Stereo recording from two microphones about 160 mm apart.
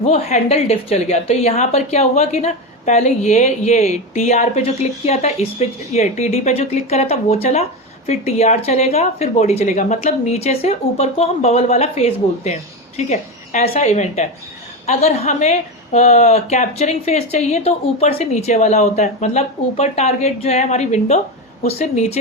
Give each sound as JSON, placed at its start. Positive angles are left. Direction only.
{"t": 0.0, "sound": "a woman's voice", "side_deg": 45}